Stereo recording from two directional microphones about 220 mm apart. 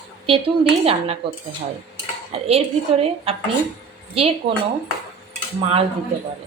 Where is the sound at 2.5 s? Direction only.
25° right (ahead or behind).